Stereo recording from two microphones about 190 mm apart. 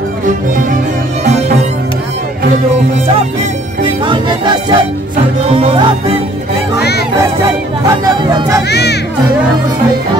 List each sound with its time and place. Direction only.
1.2 s music: 35° right (ahead or behind)
3.8 s music: 25° right (ahead or behind)
8.4 s speech: 15° right (ahead or behind)
8.6 s speech: 60° left (ahead or behind)